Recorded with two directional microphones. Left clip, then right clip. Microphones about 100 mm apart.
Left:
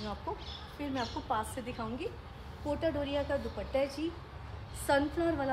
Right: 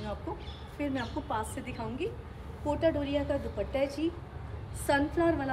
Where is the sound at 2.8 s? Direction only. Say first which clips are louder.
Right 4 dB; 25° left (ahead or behind).